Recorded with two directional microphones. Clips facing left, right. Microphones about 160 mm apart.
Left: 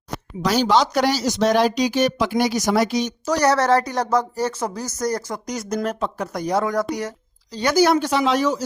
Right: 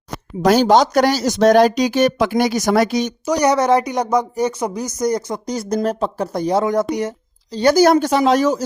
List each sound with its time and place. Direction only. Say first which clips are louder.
0.4 s speech: right 5 dB; 50° right (ahead or behind)
3.2 s speech: right 3 dB; 15° right (ahead or behind)
7.5 s speech: right 5 dB; 35° right (ahead or behind)